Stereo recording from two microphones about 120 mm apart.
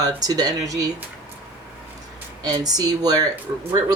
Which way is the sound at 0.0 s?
30° right (ahead or behind).